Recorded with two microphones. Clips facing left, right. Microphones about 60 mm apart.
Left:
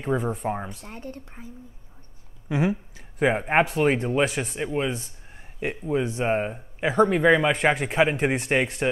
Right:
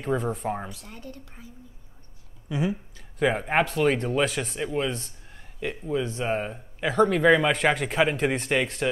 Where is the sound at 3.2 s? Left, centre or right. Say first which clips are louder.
Left 2 dB; centre.